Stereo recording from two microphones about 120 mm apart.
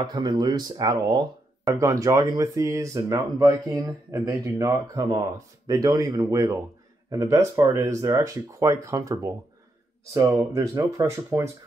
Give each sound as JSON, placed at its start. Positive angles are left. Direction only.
{"t": 0.0, "sound": "speech", "side_deg": -35}
{"t": 10.5, "sound": "speech", "side_deg": -30}